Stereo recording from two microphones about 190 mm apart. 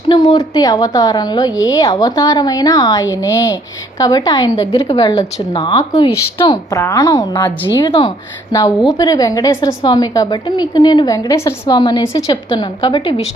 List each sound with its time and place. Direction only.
0.1 s a woman's voice: 20° left (ahead or behind)